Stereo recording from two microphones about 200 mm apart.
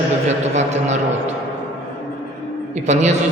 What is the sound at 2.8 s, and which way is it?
Speech, 35° right (ahead or behind).